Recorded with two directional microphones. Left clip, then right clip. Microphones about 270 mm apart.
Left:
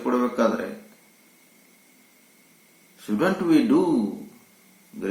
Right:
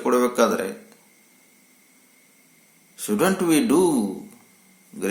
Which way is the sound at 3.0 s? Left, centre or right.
Right.